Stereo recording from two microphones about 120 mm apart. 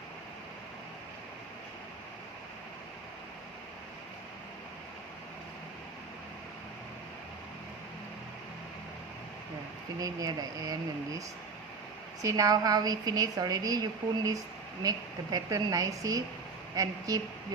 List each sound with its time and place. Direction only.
10.0 s a woman's voice: 30° right (ahead or behind)
12.2 s a woman's voice: 30° right (ahead or behind)